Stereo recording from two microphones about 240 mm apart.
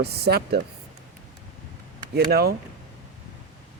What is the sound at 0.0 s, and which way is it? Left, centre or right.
Speech, right.